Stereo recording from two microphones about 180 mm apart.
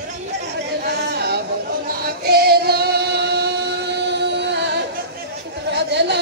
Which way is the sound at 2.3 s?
60° right (ahead or behind).